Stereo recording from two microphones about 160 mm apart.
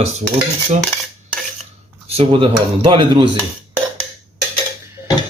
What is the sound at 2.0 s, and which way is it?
Speech, 35° right (ahead or behind).